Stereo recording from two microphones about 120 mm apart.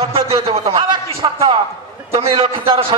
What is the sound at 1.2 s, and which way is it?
A man's voice, 40° right (ahead or behind).